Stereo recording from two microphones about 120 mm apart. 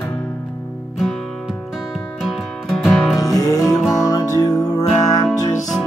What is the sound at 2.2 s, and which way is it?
Music, centre (ahead or behind).